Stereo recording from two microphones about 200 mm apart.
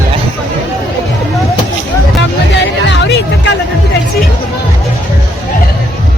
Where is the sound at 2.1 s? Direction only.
60° left (ahead or behind).